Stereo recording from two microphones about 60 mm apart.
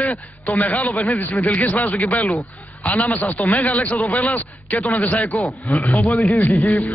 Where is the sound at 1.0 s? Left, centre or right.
Left.